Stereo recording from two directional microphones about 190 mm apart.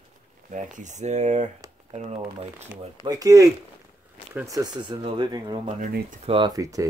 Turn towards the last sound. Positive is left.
turn(degrees=-15)  # may be behind; listen again after turning